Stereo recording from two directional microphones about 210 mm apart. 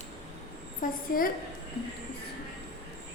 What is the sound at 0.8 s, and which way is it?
Speech, 40° left (ahead or behind).